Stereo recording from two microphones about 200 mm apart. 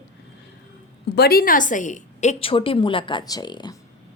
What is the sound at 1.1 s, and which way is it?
A woman's voice, 50° left (ahead or behind).